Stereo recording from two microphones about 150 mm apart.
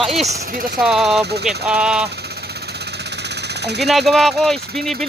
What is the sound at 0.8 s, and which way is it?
Speech, 5° right (ahead or behind).